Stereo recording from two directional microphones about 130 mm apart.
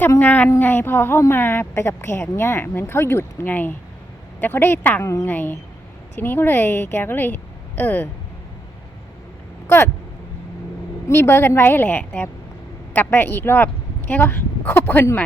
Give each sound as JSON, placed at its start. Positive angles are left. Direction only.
{"t": 0.0, "sound": "speech", "side_deg": 15}
{"t": 9.6, "sound": "speech", "side_deg": 20}
{"t": 11.1, "sound": "speech", "side_deg": 20}